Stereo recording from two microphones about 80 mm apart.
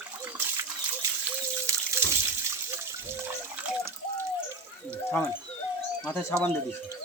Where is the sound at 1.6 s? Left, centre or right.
Right.